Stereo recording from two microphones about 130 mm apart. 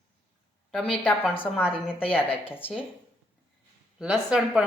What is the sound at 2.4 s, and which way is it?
Speech, 15° left (ahead or behind).